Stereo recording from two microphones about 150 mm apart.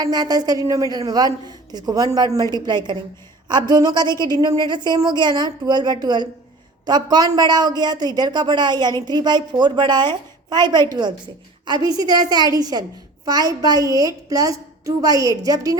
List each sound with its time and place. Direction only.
0.0 s speech: 25° right (ahead or behind)